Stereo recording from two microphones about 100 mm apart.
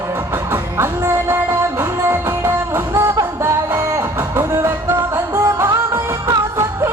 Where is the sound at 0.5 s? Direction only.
25° right (ahead or behind).